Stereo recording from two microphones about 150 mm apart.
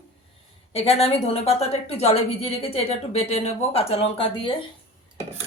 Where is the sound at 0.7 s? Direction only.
40° left (ahead or behind).